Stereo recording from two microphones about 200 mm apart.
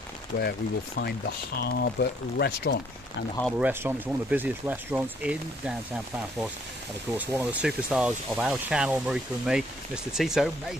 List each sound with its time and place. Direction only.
0.4 s speech: 55° left (ahead or behind)
3.5 s speech: 10° right (ahead or behind)
7.2 s speech: 5° right (ahead or behind)